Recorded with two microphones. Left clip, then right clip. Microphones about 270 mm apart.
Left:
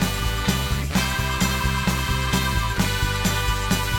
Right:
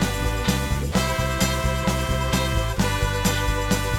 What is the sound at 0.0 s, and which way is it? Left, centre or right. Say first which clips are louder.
Music: even; centre.